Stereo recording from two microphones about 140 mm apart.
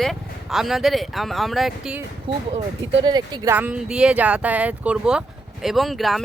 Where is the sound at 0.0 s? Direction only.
Centre (ahead or behind).